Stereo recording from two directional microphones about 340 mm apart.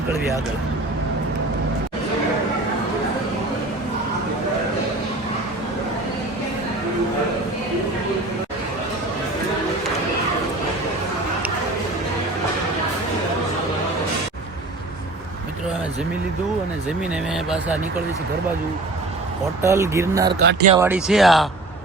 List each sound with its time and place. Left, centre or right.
17.0 s speech: centre
19.6 s speech: centre
20.4 s speech: right
20.7 s speech: centre